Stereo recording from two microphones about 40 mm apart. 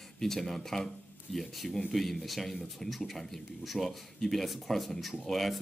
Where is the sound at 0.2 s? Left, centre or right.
Centre.